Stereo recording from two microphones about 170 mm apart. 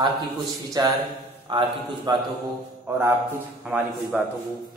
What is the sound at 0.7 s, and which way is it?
A man's voice, 20° right (ahead or behind).